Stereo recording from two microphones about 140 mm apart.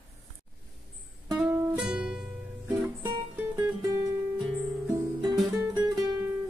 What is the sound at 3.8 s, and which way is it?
Music, 25° right (ahead or behind).